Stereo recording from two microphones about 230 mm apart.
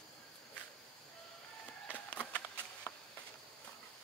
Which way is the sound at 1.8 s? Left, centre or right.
Centre.